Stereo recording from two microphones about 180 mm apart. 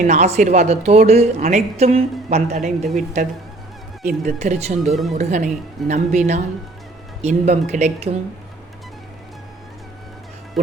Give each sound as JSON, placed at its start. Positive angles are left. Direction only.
{"t": 0.0, "sound": "a man's voice", "side_deg": -40}